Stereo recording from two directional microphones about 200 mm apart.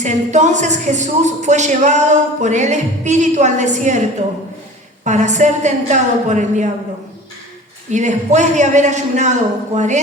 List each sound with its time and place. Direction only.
0.0 s a woman's voice: 35° right (ahead or behind)
5.0 s a woman's voice: 35° right (ahead or behind)
7.9 s a woman's voice: 35° right (ahead or behind)